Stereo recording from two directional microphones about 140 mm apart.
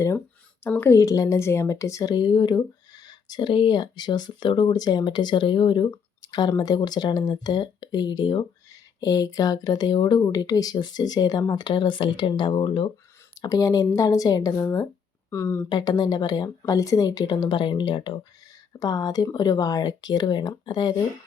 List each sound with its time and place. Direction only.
0.6 s speech: 15° left (ahead or behind); by 12.9 s 40° left (ahead or behind)
13.4 s speech: 25° left (ahead or behind)